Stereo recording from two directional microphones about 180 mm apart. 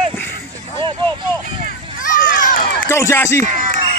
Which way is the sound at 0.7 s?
30° right (ahead or behind).